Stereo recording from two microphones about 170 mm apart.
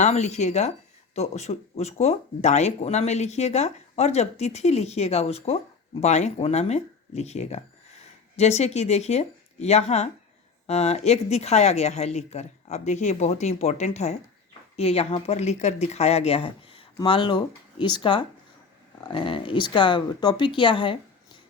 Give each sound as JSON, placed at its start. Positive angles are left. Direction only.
{"t": 0.0, "sound": "speech", "side_deg": 40}